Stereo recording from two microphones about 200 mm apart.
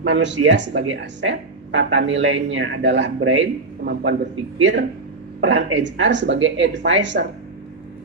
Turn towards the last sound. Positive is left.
turn(degrees=-65)  # may be behind; listen again after turning